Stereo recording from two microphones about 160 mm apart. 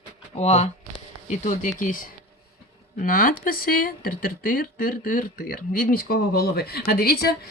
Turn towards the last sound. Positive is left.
turn(degrees=75)  # may be behind; listen again after turning